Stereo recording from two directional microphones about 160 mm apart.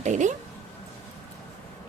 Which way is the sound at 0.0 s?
50° right (ahead or behind).